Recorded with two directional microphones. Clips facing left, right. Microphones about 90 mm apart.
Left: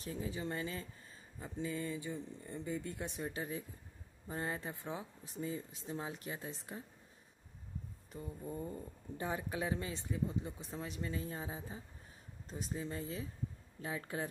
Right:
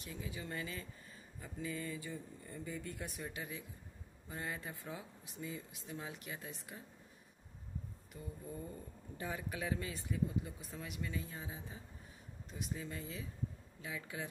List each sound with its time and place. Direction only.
0.0 s speech: 35° left (ahead or behind)
8.1 s speech: 30° left (ahead or behind)